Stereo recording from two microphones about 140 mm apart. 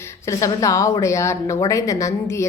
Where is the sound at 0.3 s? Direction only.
20° left (ahead or behind).